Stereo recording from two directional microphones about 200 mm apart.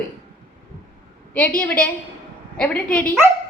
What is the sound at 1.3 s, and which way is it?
A woman's voice, 5° left (ahead or behind).